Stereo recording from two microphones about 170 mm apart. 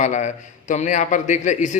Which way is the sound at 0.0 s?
45° left (ahead or behind).